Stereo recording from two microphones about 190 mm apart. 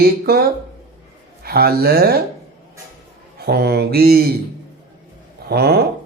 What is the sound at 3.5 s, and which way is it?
Speech, 55° right (ahead or behind).